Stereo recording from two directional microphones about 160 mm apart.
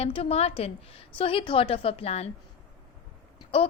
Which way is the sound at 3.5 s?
35° left (ahead or behind).